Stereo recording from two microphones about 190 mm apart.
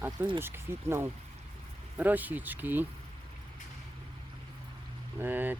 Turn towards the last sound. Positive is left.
turn(degrees=-10)  # may be behind; listen again after turning